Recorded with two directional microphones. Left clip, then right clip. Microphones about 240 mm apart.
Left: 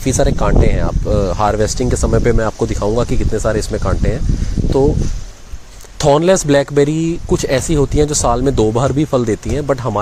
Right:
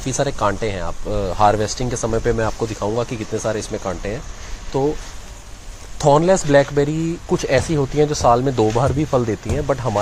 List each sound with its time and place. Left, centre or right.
0.0 s speech: left
6.0 s speech: left